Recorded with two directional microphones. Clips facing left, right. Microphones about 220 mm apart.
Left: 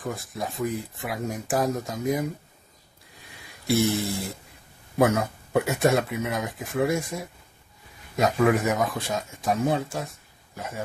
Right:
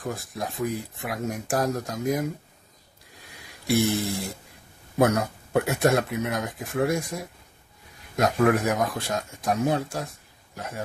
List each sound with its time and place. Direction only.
0.0 s speech: centre (ahead or behind)
3.2 s a sound: centre (ahead or behind)
4.9 s speech: centre (ahead or behind)